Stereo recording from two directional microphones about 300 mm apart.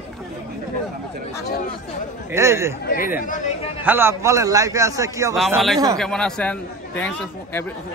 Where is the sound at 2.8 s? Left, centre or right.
Left.